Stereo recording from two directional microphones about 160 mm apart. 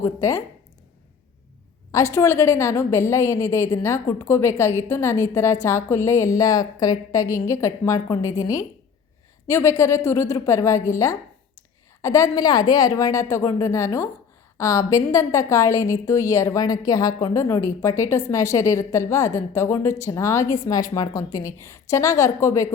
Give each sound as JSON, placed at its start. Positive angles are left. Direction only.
{"t": 0.0, "sound": "a woman's voice", "side_deg": 20}
{"t": 1.9, "sound": "a woman's voice", "side_deg": 20}